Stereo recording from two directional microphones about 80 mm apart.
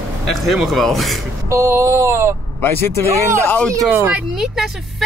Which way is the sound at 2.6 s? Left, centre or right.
Left.